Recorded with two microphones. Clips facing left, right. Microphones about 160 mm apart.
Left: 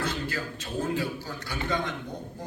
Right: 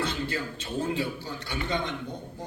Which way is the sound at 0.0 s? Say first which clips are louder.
Right 1 dB; 25° right (ahead or behind).